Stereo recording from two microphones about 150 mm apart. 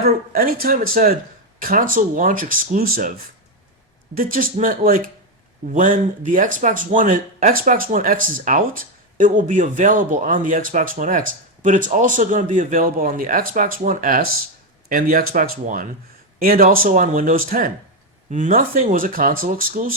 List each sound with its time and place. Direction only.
0.0 s speech: 80° right